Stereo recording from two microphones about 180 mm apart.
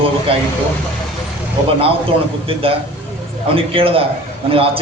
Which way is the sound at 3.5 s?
30° right (ahead or behind).